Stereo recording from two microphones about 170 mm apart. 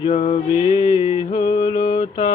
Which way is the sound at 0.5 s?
30° left (ahead or behind).